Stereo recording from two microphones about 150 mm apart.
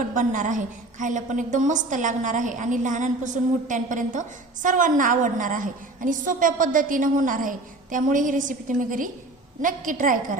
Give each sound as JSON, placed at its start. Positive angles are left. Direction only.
{"t": 0.1, "sound": "a woman's voice", "side_deg": -60}